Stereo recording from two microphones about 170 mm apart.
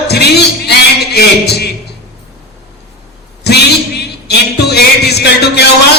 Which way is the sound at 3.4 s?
75° left (ahead or behind).